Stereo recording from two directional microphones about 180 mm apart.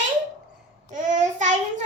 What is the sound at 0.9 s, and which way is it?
Child singing, 45° right (ahead or behind).